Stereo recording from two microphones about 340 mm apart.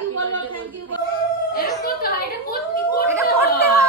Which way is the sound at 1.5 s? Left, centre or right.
Left.